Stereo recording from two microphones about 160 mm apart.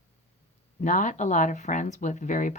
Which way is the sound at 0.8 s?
50° left (ahead or behind).